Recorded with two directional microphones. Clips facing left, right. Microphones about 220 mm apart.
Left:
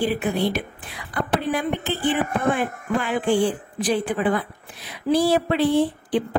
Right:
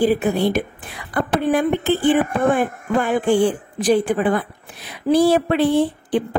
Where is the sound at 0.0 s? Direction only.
40° right (ahead or behind).